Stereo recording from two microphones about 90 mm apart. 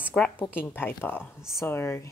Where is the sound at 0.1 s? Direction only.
10° left (ahead or behind).